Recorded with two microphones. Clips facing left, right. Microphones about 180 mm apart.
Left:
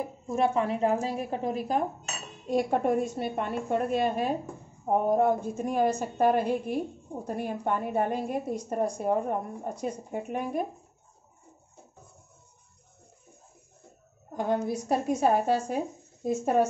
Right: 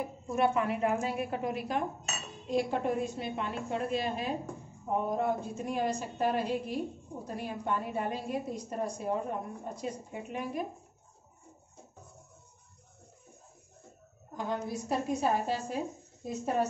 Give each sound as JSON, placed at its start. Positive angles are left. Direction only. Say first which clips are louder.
{"t": 0.3, "sound": "a woman's voice", "louder": "left 3 dB", "side_deg": 30}
{"t": 2.5, "sound": "a woman's voice", "louder": "left 5 dB", "side_deg": 50}
{"t": 14.3, "sound": "a woman's voice", "louder": "left 7 dB", "side_deg": 55}